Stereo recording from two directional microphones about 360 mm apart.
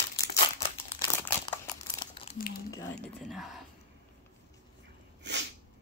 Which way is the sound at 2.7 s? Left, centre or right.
Centre.